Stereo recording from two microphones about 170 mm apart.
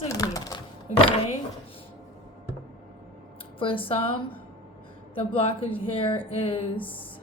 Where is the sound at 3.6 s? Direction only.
30° left (ahead or behind).